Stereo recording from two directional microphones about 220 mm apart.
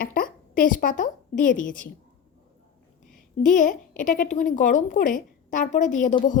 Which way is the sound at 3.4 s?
35° left (ahead or behind).